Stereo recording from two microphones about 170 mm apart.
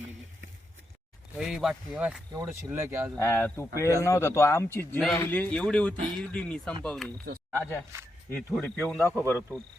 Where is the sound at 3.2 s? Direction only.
15° left (ahead or behind).